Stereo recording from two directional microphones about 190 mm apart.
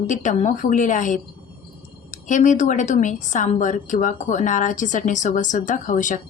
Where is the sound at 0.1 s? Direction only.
40° left (ahead or behind).